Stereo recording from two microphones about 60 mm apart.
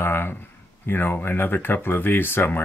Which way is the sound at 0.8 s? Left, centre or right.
Left.